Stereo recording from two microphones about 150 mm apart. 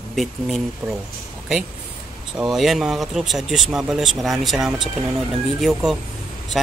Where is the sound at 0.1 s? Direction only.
Centre (ahead or behind).